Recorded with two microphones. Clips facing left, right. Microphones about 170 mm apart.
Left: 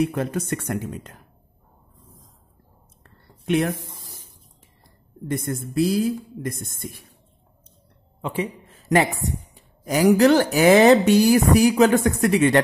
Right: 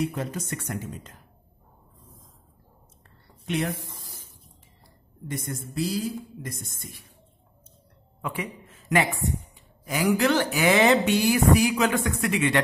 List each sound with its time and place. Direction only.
0.0 s speech: 55° left (ahead or behind)
3.4 s speech: 55° left (ahead or behind)
5.3 s speech: 55° left (ahead or behind)
8.2 s a woman's voice: 25° left (ahead or behind)